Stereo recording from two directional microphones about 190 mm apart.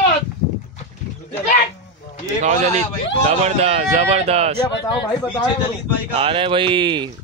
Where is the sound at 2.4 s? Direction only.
40° right (ahead or behind).